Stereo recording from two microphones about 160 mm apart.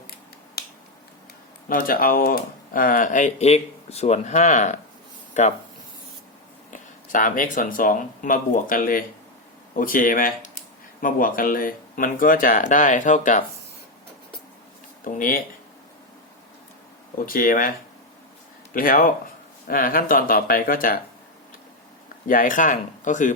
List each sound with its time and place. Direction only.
1.7 s speech: 65° left (ahead or behind); by 5.5 s 45° left (ahead or behind)
6.7 s speech: 55° left (ahead or behind)
15.0 s speech: 60° left (ahead or behind)
17.2 s speech: 60° left (ahead or behind)
22.3 s speech: 60° left (ahead or behind)